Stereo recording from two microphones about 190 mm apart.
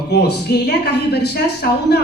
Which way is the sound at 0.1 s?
60° left (ahead or behind).